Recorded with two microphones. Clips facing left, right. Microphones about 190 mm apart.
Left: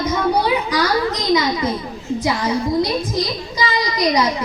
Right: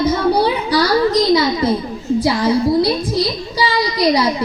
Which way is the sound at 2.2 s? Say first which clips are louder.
Right 5 dB; 35° right (ahead or behind).